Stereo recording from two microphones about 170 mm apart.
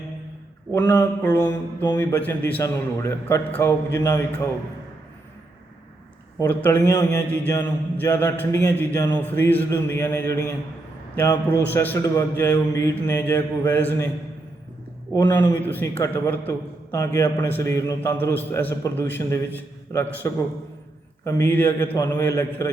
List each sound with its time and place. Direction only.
0.7 s a man's voice: 15° left (ahead or behind)
6.4 s a man's voice: 10° left (ahead or behind)
15.1 s speech: 25° left (ahead or behind)
15.6 s a man's voice: 10° left (ahead or behind)